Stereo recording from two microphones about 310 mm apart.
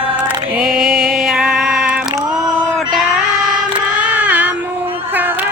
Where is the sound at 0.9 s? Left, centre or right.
Right.